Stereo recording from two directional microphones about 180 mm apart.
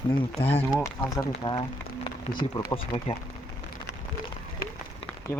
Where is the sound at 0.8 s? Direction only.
20° left (ahead or behind).